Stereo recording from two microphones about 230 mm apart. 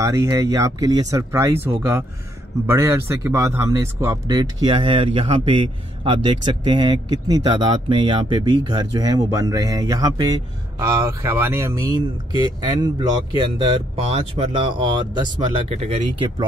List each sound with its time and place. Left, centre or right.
0.0 s speech: centre